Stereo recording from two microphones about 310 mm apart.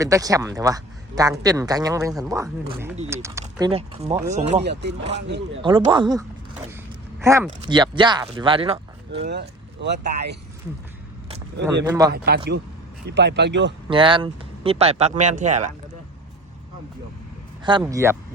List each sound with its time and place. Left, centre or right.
0.0 s speech: centre
4.6 s speech: right
5.6 s speech: centre
9.2 s speech: right
11.9 s speech: centre
12.1 s speech: right
13.9 s speech: centre
17.6 s speech: centre